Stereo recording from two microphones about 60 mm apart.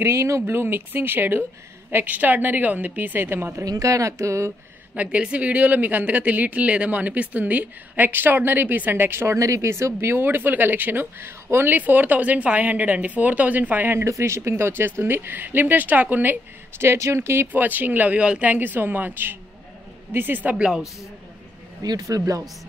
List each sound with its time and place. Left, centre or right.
0.0 s speech: right
3.6 s speech: right
4.9 s speech: right
9.4 s speech: right
14.0 s speech: right
14.5 s speech: right
17.5 s speech: right
20.5 s speech: centre
21.9 s speech: right